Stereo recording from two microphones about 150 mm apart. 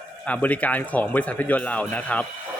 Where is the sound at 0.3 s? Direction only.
10° left (ahead or behind).